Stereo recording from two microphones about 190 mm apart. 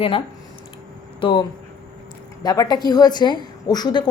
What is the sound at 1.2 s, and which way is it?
A woman's voice, 25° left (ahead or behind).